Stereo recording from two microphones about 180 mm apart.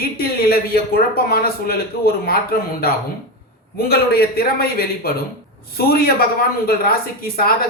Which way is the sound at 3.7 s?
60° left (ahead or behind).